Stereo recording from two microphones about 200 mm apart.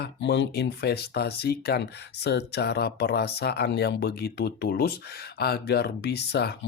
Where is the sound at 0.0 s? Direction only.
60° left (ahead or behind).